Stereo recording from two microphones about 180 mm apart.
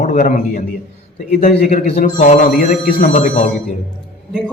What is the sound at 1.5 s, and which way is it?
A man's voice, 60° left (ahead or behind).